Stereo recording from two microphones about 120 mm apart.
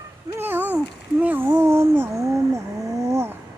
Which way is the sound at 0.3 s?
15° right (ahead or behind).